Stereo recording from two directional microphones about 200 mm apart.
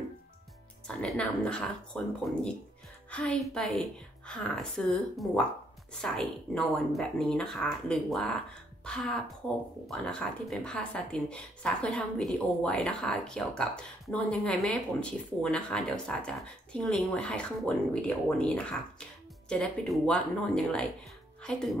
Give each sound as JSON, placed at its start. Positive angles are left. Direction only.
{"t": 0.8, "sound": "speech", "side_deg": 5}